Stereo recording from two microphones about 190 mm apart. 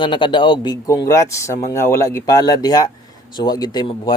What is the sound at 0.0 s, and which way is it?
Speech, 25° left (ahead or behind).